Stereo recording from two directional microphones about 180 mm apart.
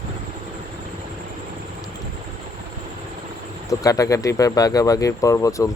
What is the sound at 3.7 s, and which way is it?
Speech, 20° left (ahead or behind).